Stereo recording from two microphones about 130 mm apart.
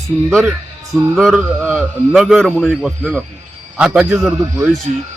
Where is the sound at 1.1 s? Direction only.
5° left (ahead or behind).